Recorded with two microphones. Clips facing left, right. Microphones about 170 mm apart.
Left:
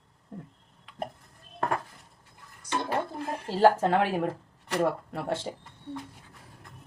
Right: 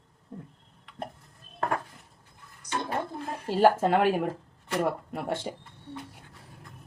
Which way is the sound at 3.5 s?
15° right (ahead or behind).